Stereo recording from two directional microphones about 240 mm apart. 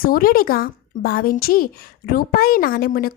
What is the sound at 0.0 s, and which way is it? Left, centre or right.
A woman's voice, left.